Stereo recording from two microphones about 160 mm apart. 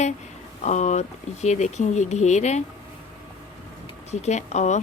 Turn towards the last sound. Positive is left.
turn(degrees=45)  # may be behind; listen again after turning